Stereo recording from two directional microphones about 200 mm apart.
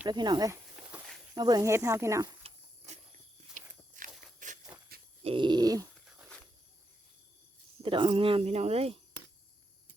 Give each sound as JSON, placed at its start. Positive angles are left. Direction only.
{"t": 0.1, "sound": "speech", "side_deg": -20}
{"t": 0.9, "sound": "walk", "side_deg": -5}
{"t": 1.4, "sound": "speech", "side_deg": -20}
{"t": 2.4, "sound": "a sound", "side_deg": -35}
{"t": 3.5, "sound": "walk", "side_deg": -40}
{"t": 4.4, "sound": "a sound", "side_deg": -40}
{"t": 5.2, "sound": "dog", "side_deg": -25}
{"t": 6.1, "sound": "a sound", "side_deg": -5}
{"t": 7.8, "sound": "speech", "side_deg": -25}